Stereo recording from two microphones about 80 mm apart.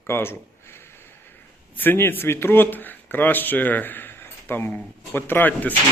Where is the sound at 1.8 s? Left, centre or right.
Left.